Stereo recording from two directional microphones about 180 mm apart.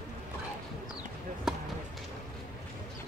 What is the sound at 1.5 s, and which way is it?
Basketball bounce, 5° right (ahead or behind).